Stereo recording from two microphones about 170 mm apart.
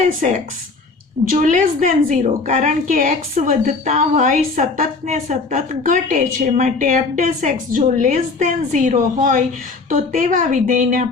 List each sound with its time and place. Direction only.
0.0 s a woman's voice: 45° right (ahead or behind)